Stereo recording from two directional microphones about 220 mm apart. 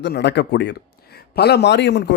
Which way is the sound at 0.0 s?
50° left (ahead or behind).